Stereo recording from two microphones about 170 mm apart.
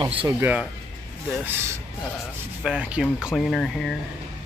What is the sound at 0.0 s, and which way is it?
Speech, 30° right (ahead or behind).